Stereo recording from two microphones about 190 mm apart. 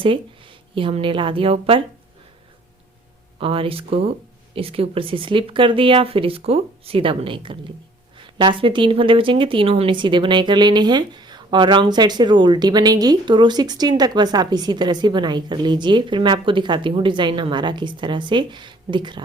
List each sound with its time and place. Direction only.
0.8 s speech: 25° right (ahead or behind)
3.4 s speech: 30° right (ahead or behind)